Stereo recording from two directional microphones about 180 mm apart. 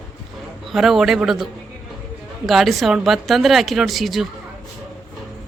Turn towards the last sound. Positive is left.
turn(degrees=0)  # may be behind; listen again after turning